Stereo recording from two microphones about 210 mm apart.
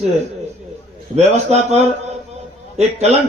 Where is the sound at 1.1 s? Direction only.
30° right (ahead or behind).